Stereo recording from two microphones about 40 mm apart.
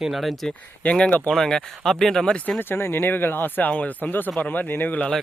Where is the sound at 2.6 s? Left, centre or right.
Left.